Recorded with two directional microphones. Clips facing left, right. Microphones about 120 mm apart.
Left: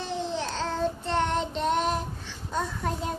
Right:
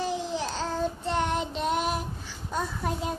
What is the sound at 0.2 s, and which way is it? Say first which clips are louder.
Child singing: left 1 dB; 10° right (ahead or behind).